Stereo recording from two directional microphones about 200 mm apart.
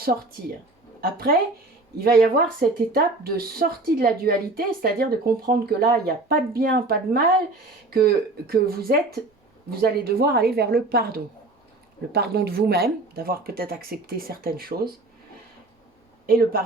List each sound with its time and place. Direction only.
1.0 s speech: 50° right (ahead or behind)
16.2 s speech: 45° right (ahead or behind)